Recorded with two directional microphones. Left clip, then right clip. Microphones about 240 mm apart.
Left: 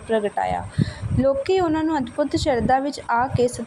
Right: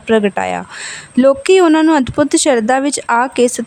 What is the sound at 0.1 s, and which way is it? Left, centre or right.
Speech, right.